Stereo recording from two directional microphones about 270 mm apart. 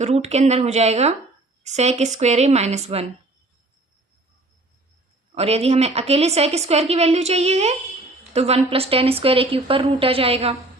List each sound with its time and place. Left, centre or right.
0.0 s a woman's voice: right
5.3 s a woman's voice: right